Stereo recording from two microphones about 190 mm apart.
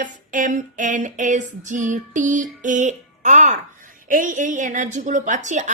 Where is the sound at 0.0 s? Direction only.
40° right (ahead or behind).